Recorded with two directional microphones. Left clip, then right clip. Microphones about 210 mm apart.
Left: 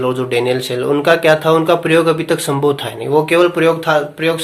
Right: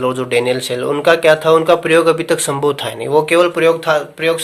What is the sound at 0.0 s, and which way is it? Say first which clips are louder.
Speech: right 1 dB; 35° right (ahead or behind).